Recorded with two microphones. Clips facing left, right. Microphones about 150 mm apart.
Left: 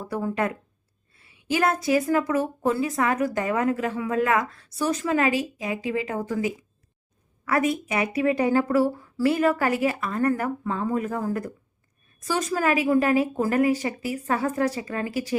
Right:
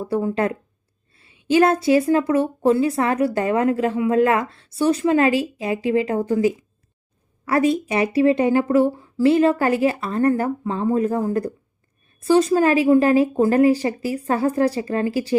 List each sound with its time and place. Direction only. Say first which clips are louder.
0.0 s a woman's voice: right 5 dB; 30° right (ahead or behind)